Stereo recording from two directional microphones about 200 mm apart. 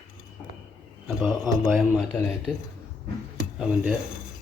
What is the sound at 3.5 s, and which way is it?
Speech, 5° right (ahead or behind).